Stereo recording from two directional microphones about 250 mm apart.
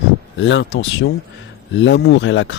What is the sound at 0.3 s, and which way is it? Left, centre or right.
A man's voice, left.